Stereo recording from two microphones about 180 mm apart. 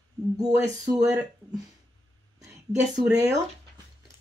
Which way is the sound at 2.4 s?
15° right (ahead or behind).